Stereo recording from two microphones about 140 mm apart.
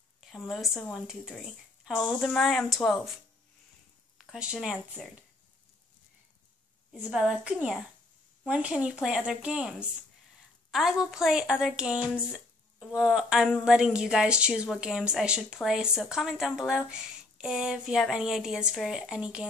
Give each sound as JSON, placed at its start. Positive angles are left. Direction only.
{"t": 0.2, "sound": "speech", "side_deg": 0}
{"t": 4.2, "sound": "speech", "side_deg": -5}
{"t": 7.0, "sound": "speech", "side_deg": -5}